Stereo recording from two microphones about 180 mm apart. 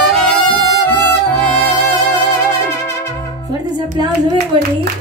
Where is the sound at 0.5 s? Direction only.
20° right (ahead or behind).